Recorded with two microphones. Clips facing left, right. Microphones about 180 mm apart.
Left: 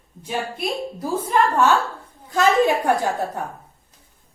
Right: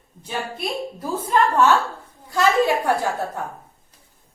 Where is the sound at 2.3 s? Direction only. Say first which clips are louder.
Left 1 dB; 20° left (ahead or behind).